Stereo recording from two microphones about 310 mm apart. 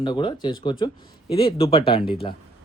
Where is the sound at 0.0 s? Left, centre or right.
Centre.